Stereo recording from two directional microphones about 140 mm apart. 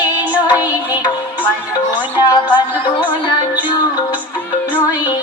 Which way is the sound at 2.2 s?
30° left (ahead or behind).